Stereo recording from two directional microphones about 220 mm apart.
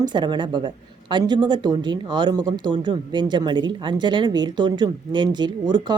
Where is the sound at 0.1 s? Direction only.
20° right (ahead or behind).